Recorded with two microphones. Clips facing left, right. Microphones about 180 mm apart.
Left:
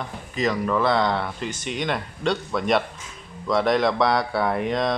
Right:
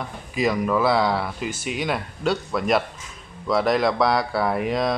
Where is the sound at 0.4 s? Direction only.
10° right (ahead or behind).